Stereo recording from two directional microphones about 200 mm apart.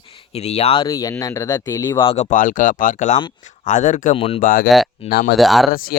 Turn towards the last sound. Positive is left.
turn(degrees=0)  # may be behind; listen again after turning